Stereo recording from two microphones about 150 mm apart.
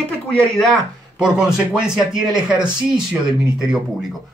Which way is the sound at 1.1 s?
5° right (ahead or behind).